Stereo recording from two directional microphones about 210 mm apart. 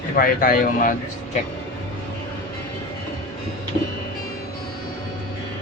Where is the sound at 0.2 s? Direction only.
40° left (ahead or behind).